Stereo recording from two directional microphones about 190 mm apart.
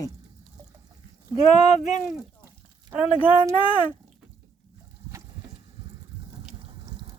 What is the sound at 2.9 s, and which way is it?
Speech, 5° right (ahead or behind).